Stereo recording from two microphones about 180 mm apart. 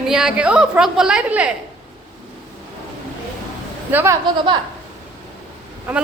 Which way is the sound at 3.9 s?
15° right (ahead or behind).